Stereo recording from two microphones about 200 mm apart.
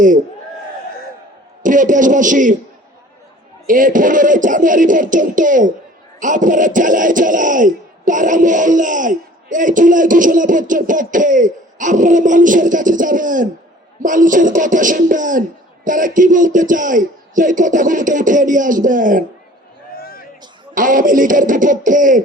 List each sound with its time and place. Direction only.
1.6 s speech: 40° right (ahead or behind)
3.7 s speech: 40° right (ahead or behind)
20.0 s a sound: 45° left (ahead or behind)
20.7 s speech: 40° right (ahead or behind)